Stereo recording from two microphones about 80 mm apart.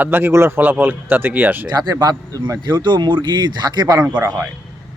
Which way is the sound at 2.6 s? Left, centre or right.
Right.